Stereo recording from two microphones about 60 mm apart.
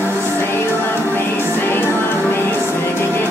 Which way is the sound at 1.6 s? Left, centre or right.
Left.